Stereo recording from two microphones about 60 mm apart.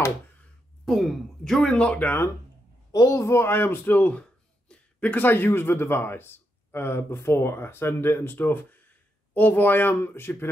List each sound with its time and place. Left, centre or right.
0.8 s speech: centre; by 2.0 s left
2.9 s a man's voice: left; by 5.1 s centre
5.1 s speech: left